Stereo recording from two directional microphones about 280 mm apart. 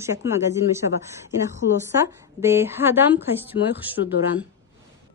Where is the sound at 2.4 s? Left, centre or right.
Centre.